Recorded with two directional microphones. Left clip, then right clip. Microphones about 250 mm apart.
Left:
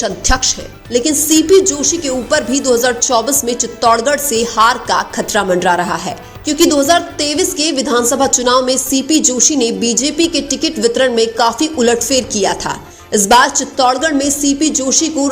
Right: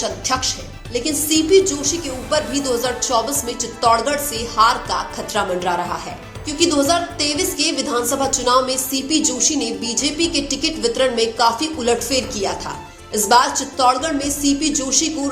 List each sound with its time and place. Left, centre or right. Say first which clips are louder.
0.0 s a woman's voice: left 5 dB; left